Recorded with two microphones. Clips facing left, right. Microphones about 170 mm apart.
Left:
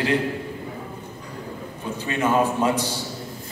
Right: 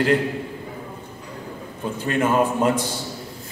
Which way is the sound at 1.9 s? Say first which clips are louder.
Right 1 dB; 50° right (ahead or behind).